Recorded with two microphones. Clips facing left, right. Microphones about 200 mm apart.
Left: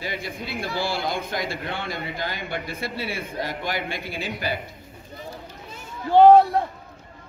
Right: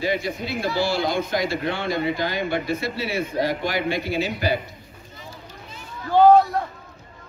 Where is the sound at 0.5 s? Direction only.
55° left (ahead or behind).